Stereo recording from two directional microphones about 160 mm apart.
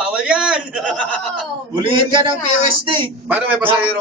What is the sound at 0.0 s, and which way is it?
Chuckle, 5° right (ahead or behind).